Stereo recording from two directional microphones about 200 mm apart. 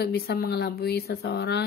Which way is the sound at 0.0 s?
50° left (ahead or behind).